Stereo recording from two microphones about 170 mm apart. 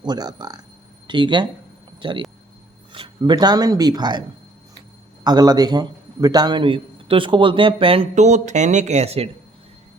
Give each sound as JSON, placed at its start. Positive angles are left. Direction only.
{"t": 0.0, "sound": "speech", "side_deg": -25}
{"t": 5.2, "sound": "a man's voice", "side_deg": -25}